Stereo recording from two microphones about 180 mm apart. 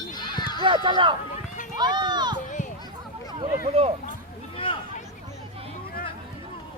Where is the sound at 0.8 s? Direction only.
25° right (ahead or behind).